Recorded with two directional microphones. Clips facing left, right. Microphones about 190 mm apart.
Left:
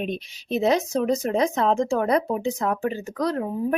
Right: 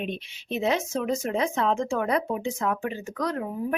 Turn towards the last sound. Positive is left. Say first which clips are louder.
# left 4 dB
turn(degrees=35)  # may be behind; listen again after turning